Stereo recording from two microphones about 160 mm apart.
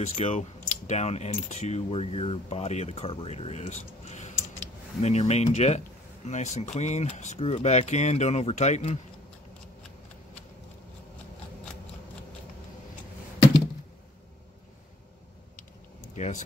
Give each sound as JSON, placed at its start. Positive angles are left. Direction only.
{"t": 0.0, "sound": "speech", "side_deg": 40}
{"t": 16.2, "sound": "speech", "side_deg": 50}